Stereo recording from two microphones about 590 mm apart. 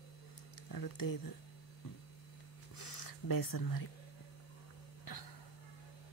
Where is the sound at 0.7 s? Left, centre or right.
Left.